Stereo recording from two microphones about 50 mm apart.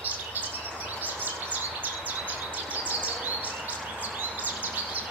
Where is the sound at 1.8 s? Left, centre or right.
Right.